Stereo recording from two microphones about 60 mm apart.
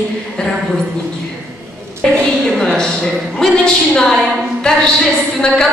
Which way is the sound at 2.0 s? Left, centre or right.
Centre.